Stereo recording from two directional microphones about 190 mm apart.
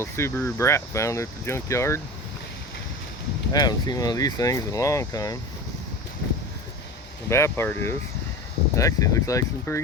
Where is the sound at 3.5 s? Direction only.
20° left (ahead or behind).